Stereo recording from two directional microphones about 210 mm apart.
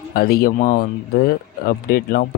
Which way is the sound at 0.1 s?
45° left (ahead or behind).